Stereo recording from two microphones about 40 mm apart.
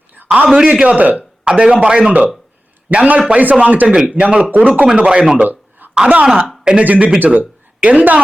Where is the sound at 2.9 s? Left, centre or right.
Right.